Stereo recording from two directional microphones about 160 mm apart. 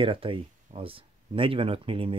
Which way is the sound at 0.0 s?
35° right (ahead or behind).